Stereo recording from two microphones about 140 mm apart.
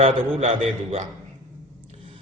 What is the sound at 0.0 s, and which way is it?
A man's voice, 50° right (ahead or behind).